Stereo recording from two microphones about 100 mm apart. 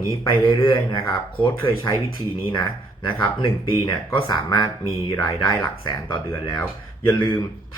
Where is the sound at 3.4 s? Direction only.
60° left (ahead or behind).